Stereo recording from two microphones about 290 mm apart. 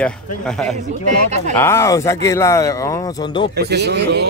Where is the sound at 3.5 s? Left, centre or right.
Right.